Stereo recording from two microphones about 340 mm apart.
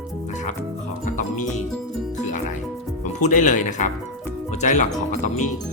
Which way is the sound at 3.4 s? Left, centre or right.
Left.